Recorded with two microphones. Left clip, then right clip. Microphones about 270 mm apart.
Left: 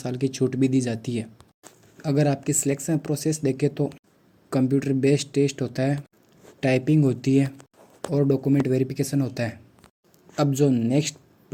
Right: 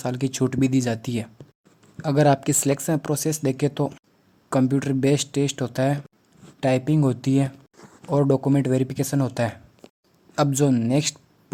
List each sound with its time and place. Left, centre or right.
0.0 s speech: right
8.6 s speech: right